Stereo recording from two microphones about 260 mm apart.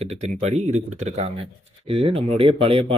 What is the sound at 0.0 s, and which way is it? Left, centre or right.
Speech, right.